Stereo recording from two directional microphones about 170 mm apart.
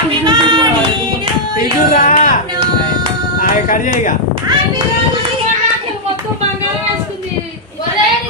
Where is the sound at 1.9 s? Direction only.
50° left (ahead or behind).